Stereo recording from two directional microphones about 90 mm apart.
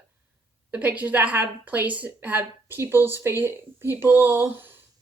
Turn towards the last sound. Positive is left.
turn(degrees=-25)  # may be behind; listen again after turning